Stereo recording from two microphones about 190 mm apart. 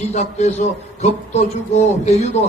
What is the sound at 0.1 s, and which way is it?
A man's voice, 35° left (ahead or behind).